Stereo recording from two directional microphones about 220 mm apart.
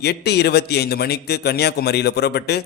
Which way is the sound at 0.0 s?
50° left (ahead or behind).